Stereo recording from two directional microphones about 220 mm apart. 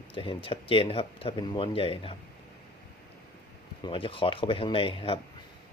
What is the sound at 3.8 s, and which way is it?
Speech, 25° left (ahead or behind).